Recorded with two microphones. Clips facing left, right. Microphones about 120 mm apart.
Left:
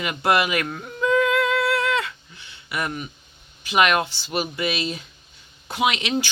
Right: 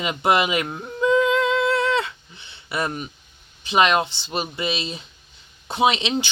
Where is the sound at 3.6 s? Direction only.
25° right (ahead or behind).